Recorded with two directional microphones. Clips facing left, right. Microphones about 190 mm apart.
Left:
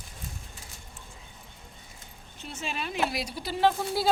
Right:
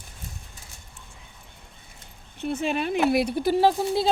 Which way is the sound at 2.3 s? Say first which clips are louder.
Right 10 dB; 60° right (ahead or behind).